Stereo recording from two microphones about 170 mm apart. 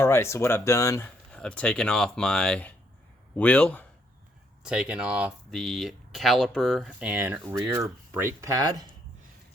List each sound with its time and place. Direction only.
0.0 s speech: 15° left (ahead or behind)
1.3 s speech: 5° left (ahead or behind)
4.6 s speech: 5° right (ahead or behind); by 8.9 s 20° right (ahead or behind)